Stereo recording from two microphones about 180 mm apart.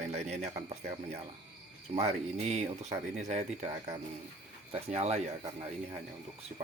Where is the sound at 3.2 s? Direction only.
40° right (ahead or behind).